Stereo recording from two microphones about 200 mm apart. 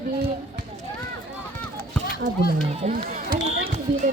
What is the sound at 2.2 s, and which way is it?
Speech, 40° right (ahead or behind).